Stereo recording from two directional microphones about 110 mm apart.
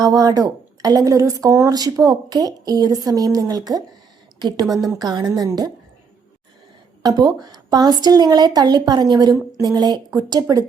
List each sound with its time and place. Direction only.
0.0 s a woman's voice: 35° right (ahead or behind)
7.0 s a woman's voice: 35° right (ahead or behind)